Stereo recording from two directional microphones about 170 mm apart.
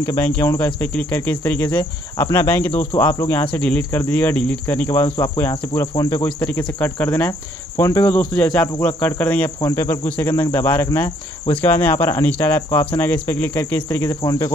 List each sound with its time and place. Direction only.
0.0 s speech: 15° left (ahead or behind)
4.8 s cricket: 25° left (ahead or behind)
5.4 s speech: 20° left (ahead or behind)
9.6 s cricket: 20° left (ahead or behind)
10.0 s speech: 10° left (ahead or behind)